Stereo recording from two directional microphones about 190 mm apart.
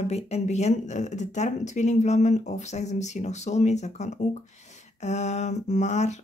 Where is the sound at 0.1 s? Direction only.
35° left (ahead or behind).